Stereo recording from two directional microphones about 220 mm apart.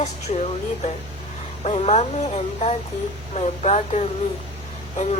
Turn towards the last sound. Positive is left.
turn(degrees=30)  # may be behind; listen again after turning